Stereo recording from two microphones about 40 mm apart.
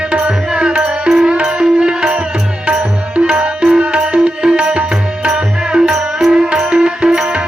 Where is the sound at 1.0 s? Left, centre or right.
Centre.